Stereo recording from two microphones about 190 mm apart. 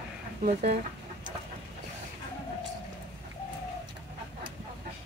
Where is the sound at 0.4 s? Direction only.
40° right (ahead or behind).